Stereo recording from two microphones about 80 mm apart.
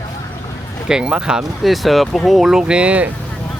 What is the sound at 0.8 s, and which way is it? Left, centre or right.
Speech, centre.